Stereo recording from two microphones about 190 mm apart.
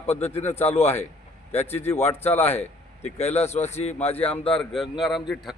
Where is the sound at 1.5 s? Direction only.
35° left (ahead or behind).